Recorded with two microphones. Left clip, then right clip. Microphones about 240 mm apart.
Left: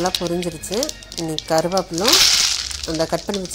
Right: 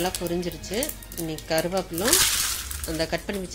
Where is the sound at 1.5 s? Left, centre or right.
Centre.